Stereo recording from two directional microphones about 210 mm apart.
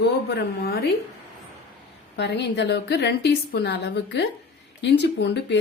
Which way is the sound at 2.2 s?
50° left (ahead or behind).